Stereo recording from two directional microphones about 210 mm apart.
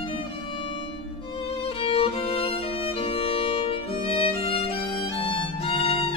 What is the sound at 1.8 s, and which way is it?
Music, 25° left (ahead or behind).